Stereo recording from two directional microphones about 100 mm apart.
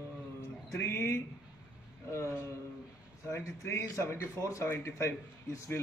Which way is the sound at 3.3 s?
30° left (ahead or behind).